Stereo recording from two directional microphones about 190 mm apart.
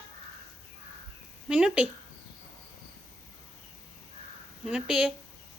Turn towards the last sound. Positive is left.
turn(degrees=-5)  # may be behind; listen again after turning